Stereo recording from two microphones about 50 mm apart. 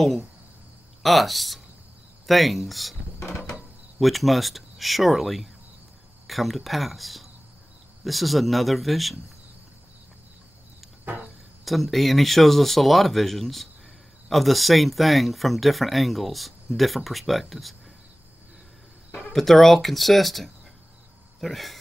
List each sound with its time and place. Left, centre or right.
0.0 s speech: centre
3.3 s mechanisms: left
3.5 s speech: centre
11.6 s speech: centre
19.3 s speech: centre